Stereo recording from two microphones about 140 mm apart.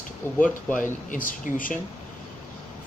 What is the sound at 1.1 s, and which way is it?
Speech, 75° left (ahead or behind).